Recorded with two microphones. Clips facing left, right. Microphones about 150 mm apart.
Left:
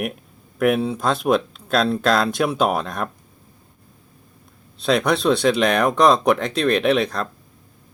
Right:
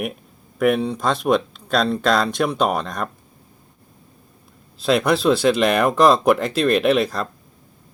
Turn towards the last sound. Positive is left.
turn(degrees=0)  # may be behind; listen again after turning